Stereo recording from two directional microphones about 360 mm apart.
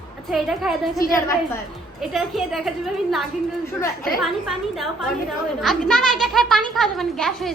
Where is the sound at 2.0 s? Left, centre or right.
Centre.